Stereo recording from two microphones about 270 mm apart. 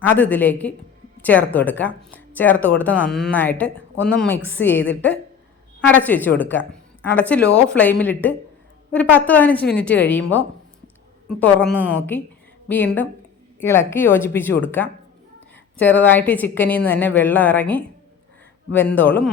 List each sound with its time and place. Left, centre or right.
0.0 s a woman's voice: centre
4.6 s a woman's voice: left
5.9 s a woman's voice: centre
11.3 s a woman's voice: centre